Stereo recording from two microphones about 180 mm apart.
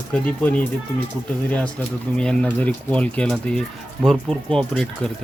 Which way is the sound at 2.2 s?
5° left (ahead or behind).